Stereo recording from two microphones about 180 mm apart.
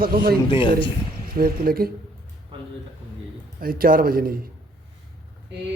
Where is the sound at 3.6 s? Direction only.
55° right (ahead or behind).